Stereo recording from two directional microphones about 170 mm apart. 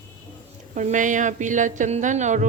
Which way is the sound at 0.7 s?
45° right (ahead or behind).